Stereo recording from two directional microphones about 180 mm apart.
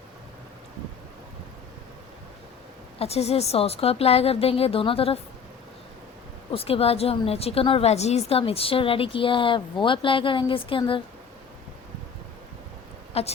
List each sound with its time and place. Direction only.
3.0 s a woman's voice: 35° left (ahead or behind)
6.5 s a woman's voice: 30° left (ahead or behind)
13.2 s a woman's voice: 35° left (ahead or behind)